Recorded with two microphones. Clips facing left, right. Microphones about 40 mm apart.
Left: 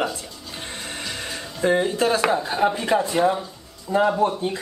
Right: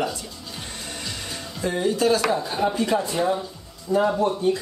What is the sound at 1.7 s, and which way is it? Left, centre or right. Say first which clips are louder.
Speech: left 1 dB; left.